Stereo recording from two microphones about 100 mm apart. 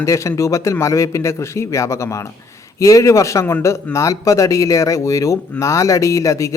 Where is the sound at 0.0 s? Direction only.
30° left (ahead or behind).